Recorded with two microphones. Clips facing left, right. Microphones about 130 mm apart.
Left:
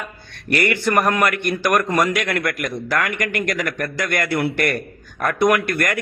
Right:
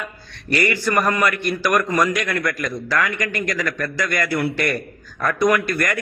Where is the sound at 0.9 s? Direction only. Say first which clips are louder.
Left 2 dB; 55° left (ahead or behind).